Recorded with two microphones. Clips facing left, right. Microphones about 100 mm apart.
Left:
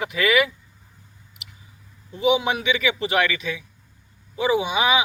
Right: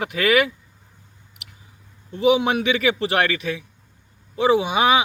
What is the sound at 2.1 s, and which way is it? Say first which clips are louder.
Speech: right 3 dB; 60° right (ahead or behind).